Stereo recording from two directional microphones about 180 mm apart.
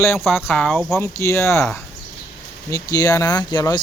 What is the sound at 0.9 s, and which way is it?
Speech, 15° left (ahead or behind).